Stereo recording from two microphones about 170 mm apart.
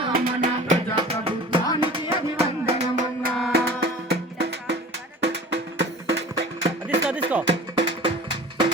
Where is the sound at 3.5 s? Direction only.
70° right (ahead or behind).